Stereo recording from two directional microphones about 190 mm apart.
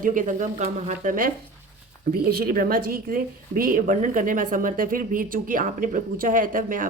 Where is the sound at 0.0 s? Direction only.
45° right (ahead or behind).